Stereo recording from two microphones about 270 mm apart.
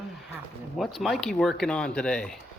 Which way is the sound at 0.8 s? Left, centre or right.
Centre.